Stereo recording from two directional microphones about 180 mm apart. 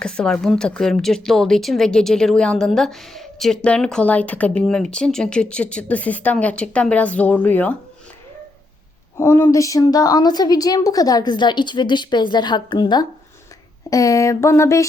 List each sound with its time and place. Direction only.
0.0 s a woman's voice: 5° left (ahead or behind)
9.1 s a woman's voice: 15° left (ahead or behind)
13.9 s a sound: 20° left (ahead or behind)